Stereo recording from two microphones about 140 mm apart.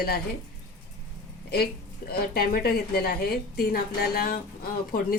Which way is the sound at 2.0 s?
90° left.